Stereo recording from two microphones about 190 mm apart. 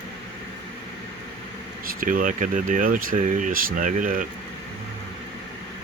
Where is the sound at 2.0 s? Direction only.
45° right (ahead or behind).